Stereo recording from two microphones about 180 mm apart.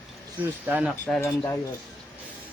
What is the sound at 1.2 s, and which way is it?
Speech, 15° left (ahead or behind).